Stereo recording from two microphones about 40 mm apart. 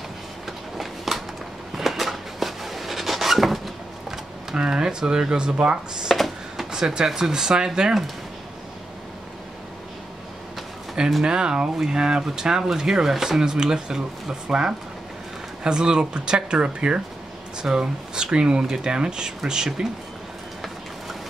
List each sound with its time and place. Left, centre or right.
0.7 s a sound: centre
4.6 s speech: centre
6.5 s drawer open or close: centre
7.1 s speech: centre
11.2 s speech: right